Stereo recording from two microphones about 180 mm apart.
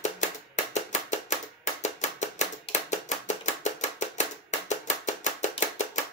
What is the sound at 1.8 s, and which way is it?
Chopping, 40° left (ahead or behind).